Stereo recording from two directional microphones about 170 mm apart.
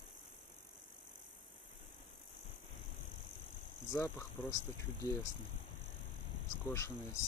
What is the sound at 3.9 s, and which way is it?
Speech, 15° left (ahead or behind).